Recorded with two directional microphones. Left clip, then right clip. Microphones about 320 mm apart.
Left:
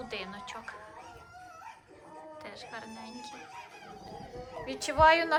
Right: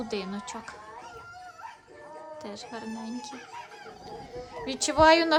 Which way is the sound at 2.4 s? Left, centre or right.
Centre.